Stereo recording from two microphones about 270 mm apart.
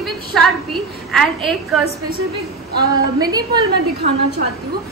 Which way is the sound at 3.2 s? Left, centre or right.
Centre.